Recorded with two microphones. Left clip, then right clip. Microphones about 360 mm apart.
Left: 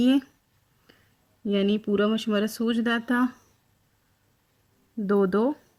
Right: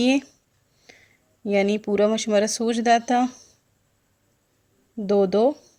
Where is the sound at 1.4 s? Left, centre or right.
Right.